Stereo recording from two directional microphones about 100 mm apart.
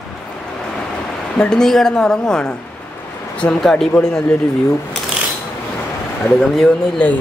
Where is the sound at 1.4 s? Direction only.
5° left (ahead or behind).